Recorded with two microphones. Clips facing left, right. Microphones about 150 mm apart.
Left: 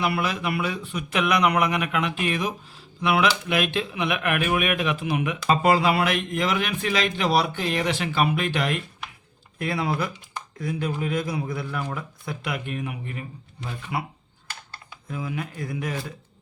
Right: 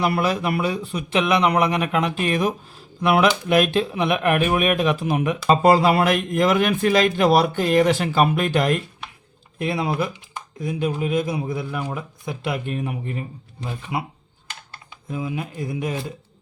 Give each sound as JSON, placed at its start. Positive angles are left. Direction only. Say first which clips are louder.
{"t": 0.0, "sound": "speech", "louder": "right 4 dB", "side_deg": -40}
{"t": 9.6, "sound": "speech", "louder": "right 3 dB", "side_deg": -20}
{"t": 13.9, "sound": "speech", "louder": "right 1 dB", "side_deg": -20}